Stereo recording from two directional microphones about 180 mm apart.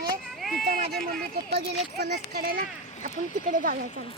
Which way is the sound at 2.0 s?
55° right (ahead or behind).